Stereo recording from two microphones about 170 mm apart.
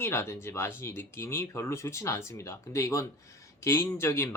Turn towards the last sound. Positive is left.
turn(degrees=15)  # may be behind; listen again after turning